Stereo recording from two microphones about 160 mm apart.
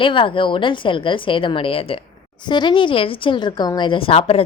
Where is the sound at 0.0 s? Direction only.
30° left (ahead or behind).